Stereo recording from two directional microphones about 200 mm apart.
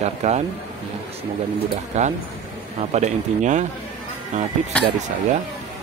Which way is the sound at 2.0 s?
35° right (ahead or behind).